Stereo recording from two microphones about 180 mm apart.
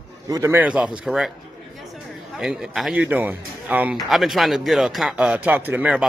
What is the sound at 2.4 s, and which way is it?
Speech, 5° right (ahead or behind).